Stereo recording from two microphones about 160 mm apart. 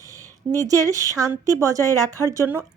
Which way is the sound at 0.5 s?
20° right (ahead or behind).